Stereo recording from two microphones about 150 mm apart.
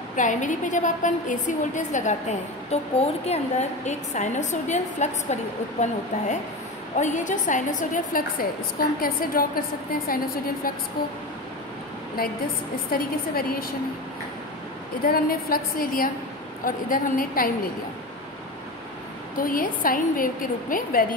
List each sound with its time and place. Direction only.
0.1 s a woman's voice: 60° left (ahead or behind)
2.7 s a woman's voice: 45° left (ahead or behind); by 10.7 s 75° left (ahead or behind)
12.2 s a woman's voice: 75° left (ahead or behind)
15.0 s a woman's voice: 80° left
19.3 s a woman's voice: 70° left (ahead or behind)